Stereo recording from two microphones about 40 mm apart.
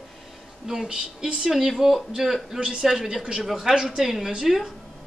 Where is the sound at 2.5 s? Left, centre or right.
Right.